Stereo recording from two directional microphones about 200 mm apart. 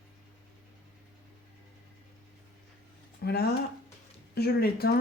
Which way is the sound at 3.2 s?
55° left (ahead or behind).